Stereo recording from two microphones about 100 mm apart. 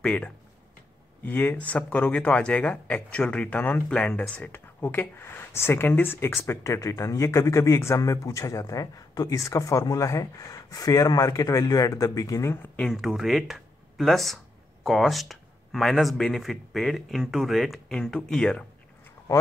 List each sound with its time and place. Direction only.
0.0 s speech: 10° left (ahead or behind); by 12.5 s 35° left (ahead or behind)
12.7 s speech: 5° left (ahead or behind)